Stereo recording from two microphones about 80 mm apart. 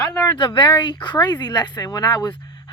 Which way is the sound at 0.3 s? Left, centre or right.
Left.